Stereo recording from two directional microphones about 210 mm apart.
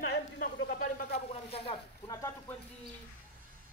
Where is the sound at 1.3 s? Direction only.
30° left (ahead or behind).